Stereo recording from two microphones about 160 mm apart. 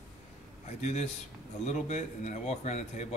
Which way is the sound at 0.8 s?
45° left (ahead or behind).